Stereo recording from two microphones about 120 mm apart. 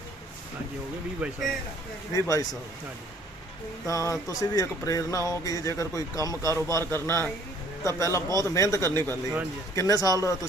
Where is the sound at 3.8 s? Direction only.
25° left (ahead or behind).